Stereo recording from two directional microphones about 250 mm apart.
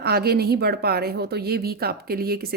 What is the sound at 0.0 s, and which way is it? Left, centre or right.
A woman's voice, right.